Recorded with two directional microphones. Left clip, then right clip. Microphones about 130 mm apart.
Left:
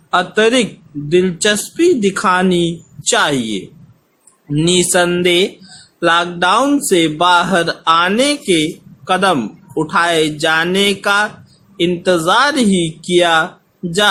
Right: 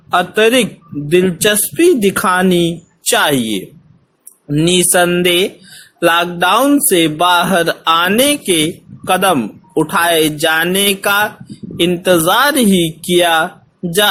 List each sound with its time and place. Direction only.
0.1 s speech: 45° right (ahead or behind)
4.6 s a sound: 40° right (ahead or behind)
6.0 s speech: 45° right (ahead or behind)